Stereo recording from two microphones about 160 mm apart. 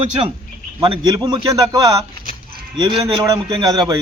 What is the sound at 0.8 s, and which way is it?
A man's voice, 25° right (ahead or behind).